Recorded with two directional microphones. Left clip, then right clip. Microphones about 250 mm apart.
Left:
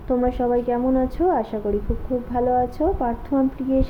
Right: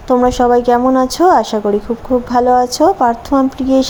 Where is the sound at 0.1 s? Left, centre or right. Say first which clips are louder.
Right 10 dB; centre.